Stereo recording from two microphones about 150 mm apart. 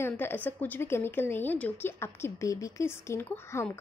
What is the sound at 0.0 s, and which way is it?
A woman's voice, 15° left (ahead or behind).